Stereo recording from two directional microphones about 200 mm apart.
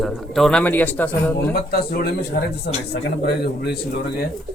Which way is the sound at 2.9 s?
55° left (ahead or behind).